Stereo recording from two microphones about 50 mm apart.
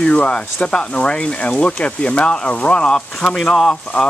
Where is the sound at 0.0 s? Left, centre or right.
Left.